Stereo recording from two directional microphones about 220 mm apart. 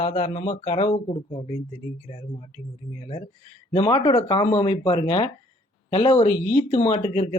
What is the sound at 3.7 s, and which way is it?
Speech, 20° left (ahead or behind).